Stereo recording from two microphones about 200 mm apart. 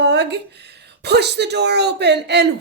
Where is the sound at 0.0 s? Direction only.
60° right (ahead or behind).